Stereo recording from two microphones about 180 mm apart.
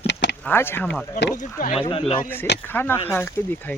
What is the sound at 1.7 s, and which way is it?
Speech, 30° left (ahead or behind).